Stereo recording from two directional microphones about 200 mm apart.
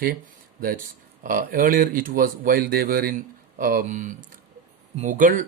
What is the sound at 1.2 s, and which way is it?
Speech, 45° right (ahead or behind).